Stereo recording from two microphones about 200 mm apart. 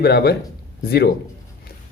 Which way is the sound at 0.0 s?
55° left (ahead or behind).